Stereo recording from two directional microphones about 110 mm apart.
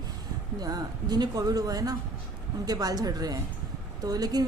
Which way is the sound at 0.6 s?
40° right (ahead or behind).